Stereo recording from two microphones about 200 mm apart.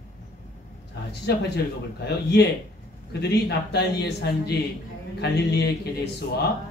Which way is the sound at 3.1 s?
55° left (ahead or behind).